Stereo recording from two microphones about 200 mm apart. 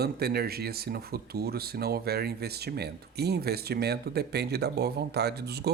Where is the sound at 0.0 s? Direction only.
50° right (ahead or behind).